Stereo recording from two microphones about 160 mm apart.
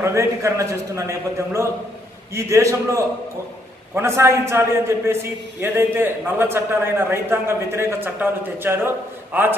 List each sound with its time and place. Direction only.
0.0 s a man's voice: 20° right (ahead or behind)